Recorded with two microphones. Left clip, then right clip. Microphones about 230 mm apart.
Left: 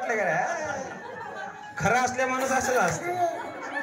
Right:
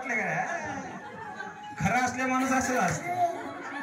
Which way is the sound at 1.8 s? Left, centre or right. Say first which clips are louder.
Left 3 dB; centre.